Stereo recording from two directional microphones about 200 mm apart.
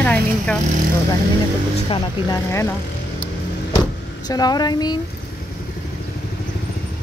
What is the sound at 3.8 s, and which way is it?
Vehicle, 20° left (ahead or behind).